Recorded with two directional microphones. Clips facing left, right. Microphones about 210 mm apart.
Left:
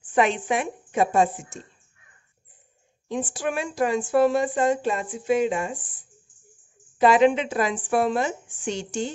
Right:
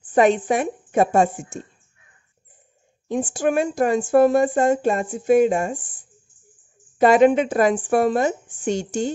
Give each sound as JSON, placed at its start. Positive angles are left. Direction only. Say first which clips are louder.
{"t": 0.0, "sound": "speech", "louder": "right 5 dB", "side_deg": -40}
{"t": 3.1, "sound": "speech", "louder": "right 6 dB", "side_deg": -45}
{"t": 7.0, "sound": "speech", "louder": "right 4 dB", "side_deg": -45}